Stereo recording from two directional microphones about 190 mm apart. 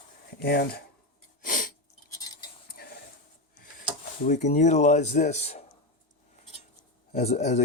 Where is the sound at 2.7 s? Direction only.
50° left (ahead or behind).